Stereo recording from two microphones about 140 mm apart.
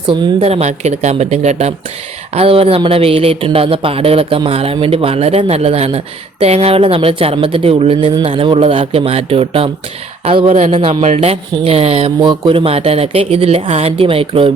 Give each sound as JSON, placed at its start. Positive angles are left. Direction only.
{"t": 0.1, "sound": "speech", "side_deg": -45}